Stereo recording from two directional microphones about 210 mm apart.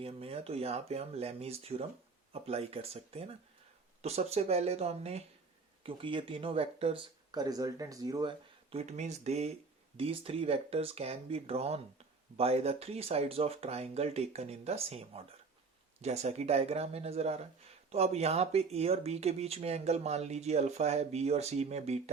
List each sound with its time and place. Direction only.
0.0 s speech: 25° right (ahead or behind)